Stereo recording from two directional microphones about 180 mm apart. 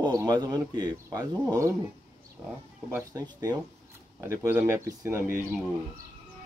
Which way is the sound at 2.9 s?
20° right (ahead or behind).